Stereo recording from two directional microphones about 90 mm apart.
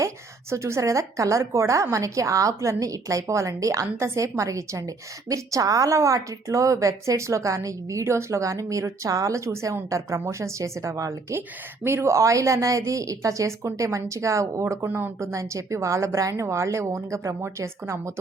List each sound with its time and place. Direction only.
0.5 s a woman's voice: 35° right (ahead or behind)
14.8 s speech: 20° right (ahead or behind)
15.2 s a woman's voice: 35° right (ahead or behind)